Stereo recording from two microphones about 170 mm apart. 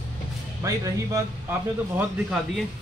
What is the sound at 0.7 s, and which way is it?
Speech, 20° right (ahead or behind).